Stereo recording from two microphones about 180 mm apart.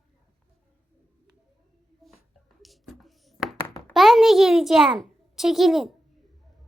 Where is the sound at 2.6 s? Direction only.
Centre (ahead or behind).